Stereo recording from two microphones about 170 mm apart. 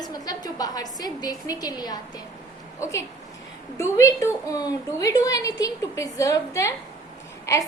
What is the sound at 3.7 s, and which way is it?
A woman's voice, 15° left (ahead or behind).